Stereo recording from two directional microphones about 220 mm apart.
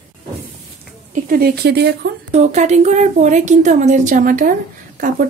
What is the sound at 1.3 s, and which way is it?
Speech, 45° right (ahead or behind).